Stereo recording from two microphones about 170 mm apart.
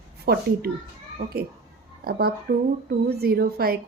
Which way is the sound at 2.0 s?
65° right (ahead or behind).